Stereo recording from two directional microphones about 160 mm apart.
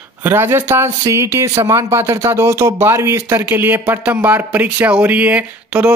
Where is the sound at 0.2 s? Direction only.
15° right (ahead or behind).